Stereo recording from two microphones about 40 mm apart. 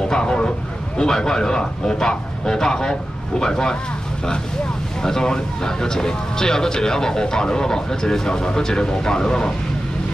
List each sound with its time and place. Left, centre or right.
0.1 s vehicle: left
0.9 s speech: centre
5.0 s speech: centre